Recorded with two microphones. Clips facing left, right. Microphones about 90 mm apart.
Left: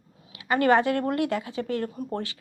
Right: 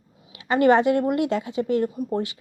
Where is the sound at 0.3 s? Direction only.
25° right (ahead or behind).